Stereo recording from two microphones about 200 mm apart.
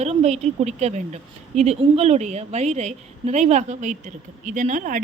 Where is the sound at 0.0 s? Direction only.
30° right (ahead or behind).